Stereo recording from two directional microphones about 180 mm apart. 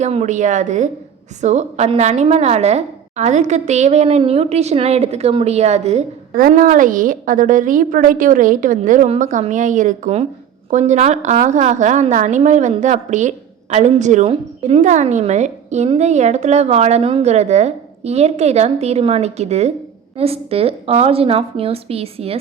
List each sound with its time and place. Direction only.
0.0 s a woman's voice: 40° right (ahead or behind)
6.3 s a woman's voice: 50° right (ahead or behind); by 22.4 s 35° right (ahead or behind)